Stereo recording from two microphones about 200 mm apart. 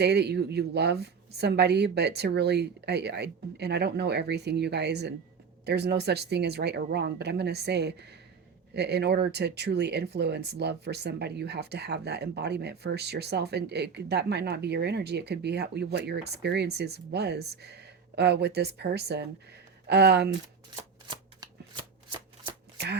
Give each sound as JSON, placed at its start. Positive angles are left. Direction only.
{"t": 0.0, "sound": "speech", "side_deg": -55}